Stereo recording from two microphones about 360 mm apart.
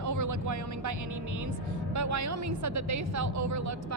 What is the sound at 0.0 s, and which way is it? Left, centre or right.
Music, right.